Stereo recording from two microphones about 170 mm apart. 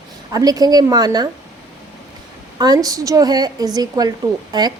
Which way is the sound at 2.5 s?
25° right (ahead or behind).